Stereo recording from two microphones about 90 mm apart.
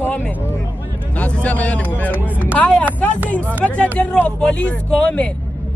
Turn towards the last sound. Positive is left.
turn(degrees=15)  # may be behind; listen again after turning